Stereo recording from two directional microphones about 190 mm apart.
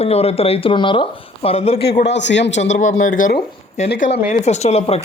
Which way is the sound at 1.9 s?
65° left (ahead or behind).